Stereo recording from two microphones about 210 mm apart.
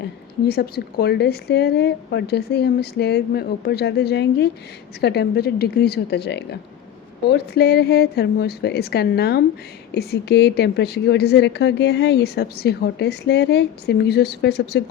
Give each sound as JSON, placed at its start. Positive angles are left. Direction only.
{"t": 0.0, "sound": "a woman's voice", "side_deg": 45}